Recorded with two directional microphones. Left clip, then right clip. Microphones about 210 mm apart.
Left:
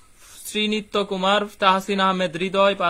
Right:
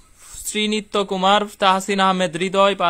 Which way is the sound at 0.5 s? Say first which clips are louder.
Right 2 dB; 20° right (ahead or behind).